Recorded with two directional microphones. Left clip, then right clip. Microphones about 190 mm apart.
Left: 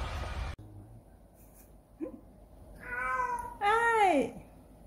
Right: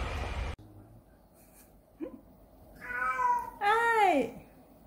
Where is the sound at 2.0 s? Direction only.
5° right (ahead or behind).